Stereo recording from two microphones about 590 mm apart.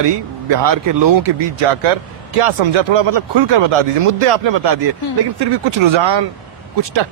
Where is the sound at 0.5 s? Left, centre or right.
Right.